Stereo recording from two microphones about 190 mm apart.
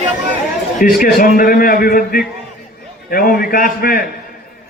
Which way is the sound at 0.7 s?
45° left (ahead or behind).